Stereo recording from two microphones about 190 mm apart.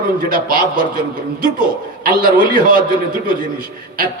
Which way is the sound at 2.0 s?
45° right (ahead or behind).